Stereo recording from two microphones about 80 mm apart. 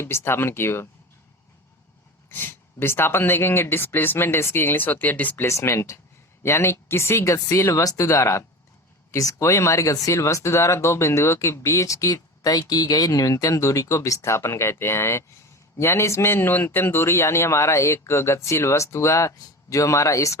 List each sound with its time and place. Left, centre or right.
0.0 s speech: left
2.3 s speech: left
5.5 s speech: left